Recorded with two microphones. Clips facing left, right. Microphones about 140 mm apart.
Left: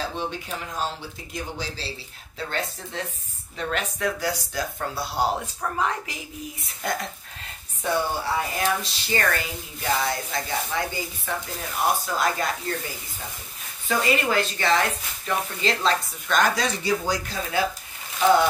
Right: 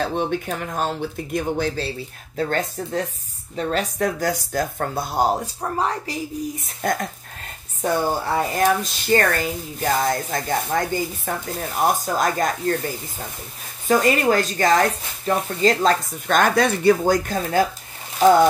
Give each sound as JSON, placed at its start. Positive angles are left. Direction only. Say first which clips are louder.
{"t": 0.0, "sound": "speech", "louder": "right 7 dB", "side_deg": -55}
{"t": 5.6, "sound": "a woman's voice", "louder": "right 3 dB", "side_deg": -35}
{"t": 6.8, "sound": "a woman's voice", "louder": "right 5 dB", "side_deg": -45}